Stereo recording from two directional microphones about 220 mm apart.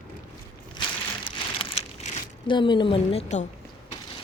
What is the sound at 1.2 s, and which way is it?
Crumpling, 25° left (ahead or behind).